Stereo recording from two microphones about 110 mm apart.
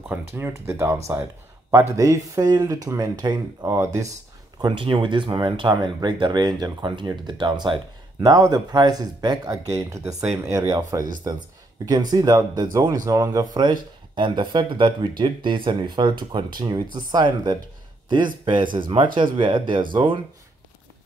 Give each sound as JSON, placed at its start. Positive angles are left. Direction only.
{"t": 0.3, "sound": "speech", "side_deg": -20}
{"t": 4.6, "sound": "speech", "side_deg": -45}
{"t": 8.2, "sound": "speech", "side_deg": -30}
{"t": 10.7, "sound": "speech", "side_deg": -35}